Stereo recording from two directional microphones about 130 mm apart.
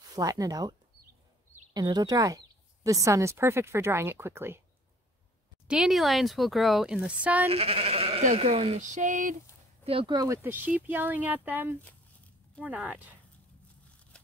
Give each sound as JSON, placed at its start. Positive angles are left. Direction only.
{"t": 0.1, "sound": "a woman's voice", "side_deg": -30}
{"t": 5.7, "sound": "speech", "side_deg": 0}
{"t": 7.4, "sound": "sheep", "side_deg": -50}
{"t": 8.4, "sound": "speech", "side_deg": -50}
{"t": 8.9, "sound": "a sound", "side_deg": -75}
{"t": 9.8, "sound": "speech", "side_deg": -40}
{"t": 10.4, "sound": "speech", "side_deg": -15}
{"t": 14.1, "sound": "a sound", "side_deg": 10}